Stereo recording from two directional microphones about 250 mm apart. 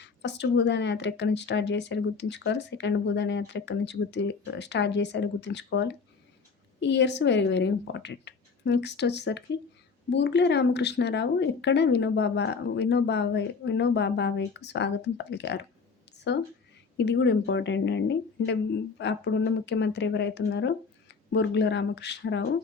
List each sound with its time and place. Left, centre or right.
0.0 s speech: left
16.1 s a sound: left
17.0 s speech: left